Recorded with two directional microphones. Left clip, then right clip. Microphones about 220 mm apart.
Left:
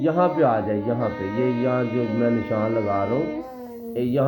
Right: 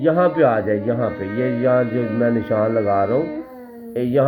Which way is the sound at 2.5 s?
30° right (ahead or behind).